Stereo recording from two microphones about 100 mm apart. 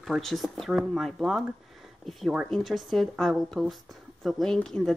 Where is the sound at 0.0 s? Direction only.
Centre (ahead or behind).